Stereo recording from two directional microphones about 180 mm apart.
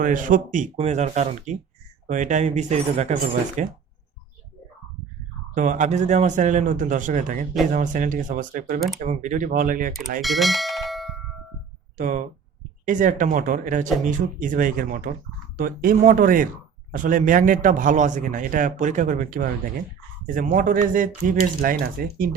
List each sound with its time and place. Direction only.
0.0 s a man's voice: 45° right (ahead or behind)
5.5 s a man's voice: 45° right (ahead or behind)
10.2 s speech: centre (ahead or behind)
11.9 s a man's voice: 45° right (ahead or behind)